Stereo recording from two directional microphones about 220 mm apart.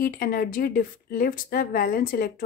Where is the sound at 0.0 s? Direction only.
40° left (ahead or behind).